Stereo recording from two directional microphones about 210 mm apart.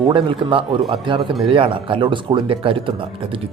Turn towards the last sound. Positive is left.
turn(degrees=-25)  # may be behind; listen again after turning